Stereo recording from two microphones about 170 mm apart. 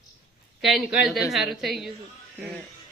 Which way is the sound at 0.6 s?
Centre (ahead or behind).